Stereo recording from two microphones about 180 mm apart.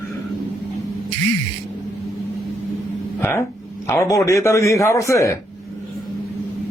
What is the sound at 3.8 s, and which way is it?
A man's voice, 15° left (ahead or behind).